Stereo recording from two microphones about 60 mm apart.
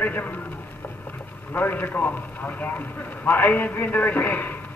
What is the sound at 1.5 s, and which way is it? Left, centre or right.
Speech, left.